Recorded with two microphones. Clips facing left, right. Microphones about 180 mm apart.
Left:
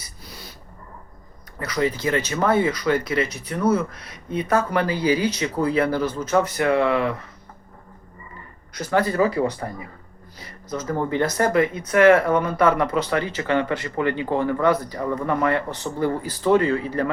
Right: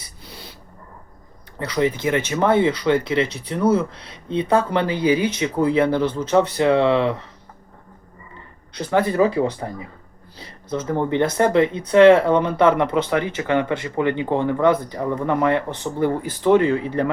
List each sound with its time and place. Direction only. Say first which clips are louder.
0.3 s a sound: right 2 dB; 25° right (ahead or behind)
1.5 s speech: right 3 dB; 30° right (ahead or behind)
1.8 s speech: right 2 dB; 20° right (ahead or behind)
8.9 s speech: right 2 dB; 20° right (ahead or behind)
10.7 s speech: right 3 dB; 25° right (ahead or behind)